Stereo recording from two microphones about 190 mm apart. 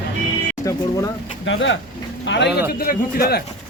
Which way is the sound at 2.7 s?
50° left (ahead or behind).